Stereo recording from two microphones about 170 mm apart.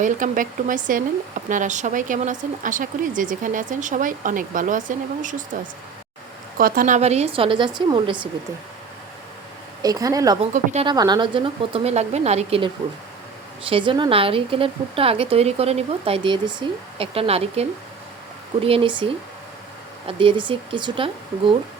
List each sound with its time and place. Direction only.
0.0 s speech: 50° right (ahead or behind)
6.6 s speech: 55° right (ahead or behind); by 8.1 s 30° right (ahead or behind)
9.8 s speech: 20° right (ahead or behind)
10.5 s speech: 45° right (ahead or behind)
10.8 s speech: 25° right (ahead or behind)